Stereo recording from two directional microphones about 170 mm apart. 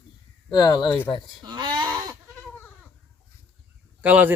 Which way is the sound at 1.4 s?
25° right (ahead or behind).